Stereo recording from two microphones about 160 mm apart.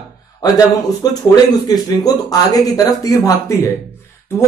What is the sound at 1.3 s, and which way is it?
Speech, 25° left (ahead or behind).